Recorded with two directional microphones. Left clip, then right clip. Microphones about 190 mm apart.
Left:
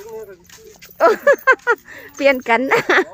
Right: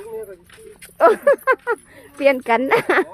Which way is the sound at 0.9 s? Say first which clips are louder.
Left 1 dB; centre (ahead or behind).